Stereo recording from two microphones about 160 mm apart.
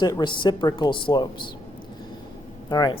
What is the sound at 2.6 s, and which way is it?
Speech, 20° left (ahead or behind).